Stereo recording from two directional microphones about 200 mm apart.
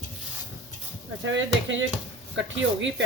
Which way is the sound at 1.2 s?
70° right (ahead or behind).